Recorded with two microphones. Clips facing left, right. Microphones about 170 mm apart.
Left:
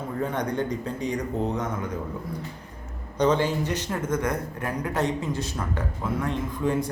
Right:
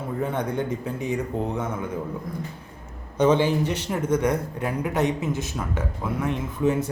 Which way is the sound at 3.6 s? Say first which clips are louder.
Right 2 dB; 25° right (ahead or behind).